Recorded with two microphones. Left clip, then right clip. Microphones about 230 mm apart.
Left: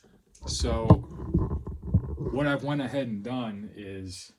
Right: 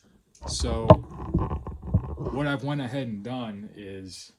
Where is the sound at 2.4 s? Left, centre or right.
Right.